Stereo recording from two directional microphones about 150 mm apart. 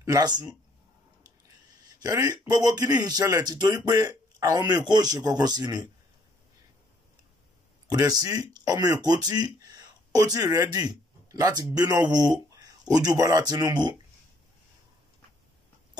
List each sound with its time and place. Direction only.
0.0 s speech: 25° right (ahead or behind)
2.0 s speech: 25° right (ahead or behind)
7.9 s speech: 25° right (ahead or behind)